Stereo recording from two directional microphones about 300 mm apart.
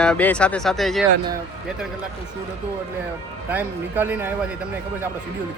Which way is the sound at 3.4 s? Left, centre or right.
Centre.